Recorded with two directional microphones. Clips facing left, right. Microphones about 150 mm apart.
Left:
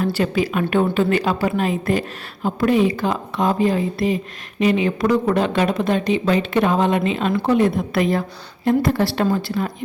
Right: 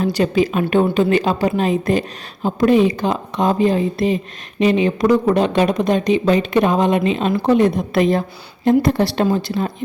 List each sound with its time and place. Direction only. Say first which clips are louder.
0.0 s a woman's voice: right 3 dB; 20° right (ahead or behind)